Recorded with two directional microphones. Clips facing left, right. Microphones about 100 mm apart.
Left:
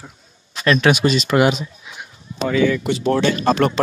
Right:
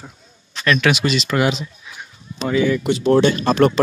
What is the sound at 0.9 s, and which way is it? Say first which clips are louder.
Speech: left 3 dB; 40° left (ahead or behind).